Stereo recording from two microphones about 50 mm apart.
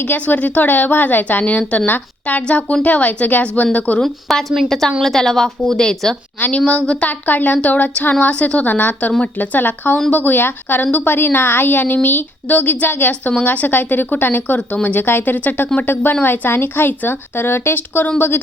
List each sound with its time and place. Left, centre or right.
0.0 s a woman's voice: left
4.0 s a woman's voice: centre
6.7 s a woman's voice: left
15.0 s a woman's voice: left